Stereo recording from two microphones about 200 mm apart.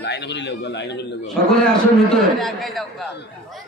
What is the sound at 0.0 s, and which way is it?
Speech, 60° left (ahead or behind).